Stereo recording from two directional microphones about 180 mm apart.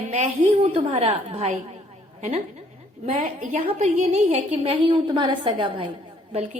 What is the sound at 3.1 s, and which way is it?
A woman's voice, 40° right (ahead or behind).